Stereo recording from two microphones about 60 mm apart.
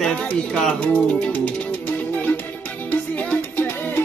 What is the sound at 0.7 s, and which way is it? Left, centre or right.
Music, left.